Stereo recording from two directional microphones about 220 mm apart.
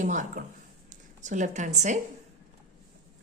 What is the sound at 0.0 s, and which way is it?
A woman's voice, 35° right (ahead or behind).